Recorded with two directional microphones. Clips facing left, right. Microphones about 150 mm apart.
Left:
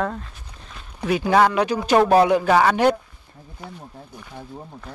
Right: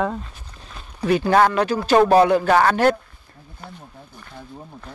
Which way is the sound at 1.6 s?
15° left (ahead or behind).